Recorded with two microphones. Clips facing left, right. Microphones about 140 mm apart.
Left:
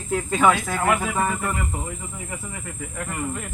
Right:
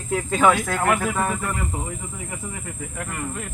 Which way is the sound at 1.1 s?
15° left (ahead or behind).